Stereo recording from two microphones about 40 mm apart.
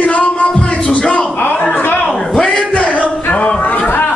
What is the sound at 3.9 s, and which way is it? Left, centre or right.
Chatter, left.